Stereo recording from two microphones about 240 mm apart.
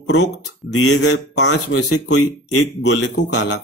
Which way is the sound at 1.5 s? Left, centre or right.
Left.